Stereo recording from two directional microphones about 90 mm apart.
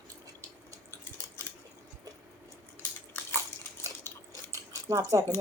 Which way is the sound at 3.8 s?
40° right (ahead or behind).